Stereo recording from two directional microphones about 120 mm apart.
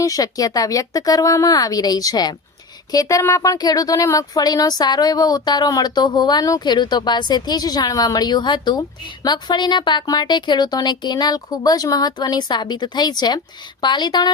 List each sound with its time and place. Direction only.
0.0 s speech: 30° left (ahead or behind)